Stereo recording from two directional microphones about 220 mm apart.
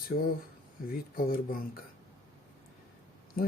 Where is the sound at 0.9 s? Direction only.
40° left (ahead or behind).